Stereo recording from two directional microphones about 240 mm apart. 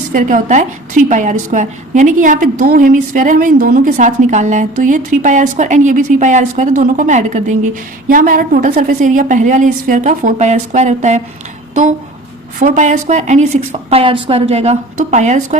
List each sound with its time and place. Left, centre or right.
0.1 s a woman's voice: right